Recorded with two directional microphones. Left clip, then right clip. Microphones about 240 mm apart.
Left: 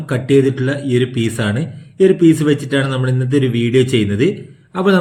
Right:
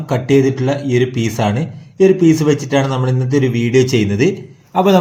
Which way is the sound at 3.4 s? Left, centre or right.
Centre.